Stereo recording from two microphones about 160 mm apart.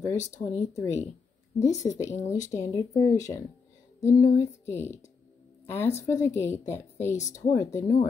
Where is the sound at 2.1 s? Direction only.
50° left (ahead or behind).